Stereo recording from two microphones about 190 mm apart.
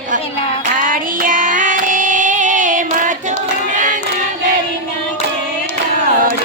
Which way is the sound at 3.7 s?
40° right (ahead or behind).